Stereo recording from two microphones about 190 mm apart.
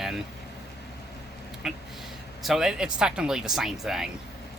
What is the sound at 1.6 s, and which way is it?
Speech, 5° right (ahead or behind).